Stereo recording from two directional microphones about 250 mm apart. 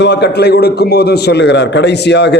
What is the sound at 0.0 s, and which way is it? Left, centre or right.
A man's voice, left.